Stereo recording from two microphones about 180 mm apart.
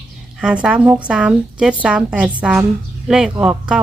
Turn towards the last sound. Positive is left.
turn(degrees=-5)  # may be behind; listen again after turning